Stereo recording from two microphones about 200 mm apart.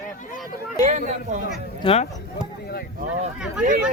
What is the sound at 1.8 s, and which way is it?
Speech, 30° left (ahead or behind).